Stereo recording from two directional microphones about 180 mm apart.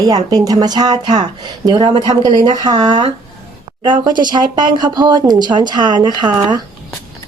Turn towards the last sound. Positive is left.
turn(degrees=-25)  # may be behind; listen again after turning